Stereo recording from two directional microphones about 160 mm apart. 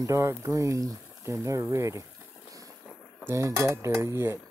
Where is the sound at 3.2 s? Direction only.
15° right (ahead or behind).